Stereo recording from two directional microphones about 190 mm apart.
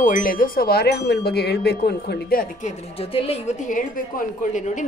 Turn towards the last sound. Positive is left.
turn(degrees=45)  # may be behind; listen again after turning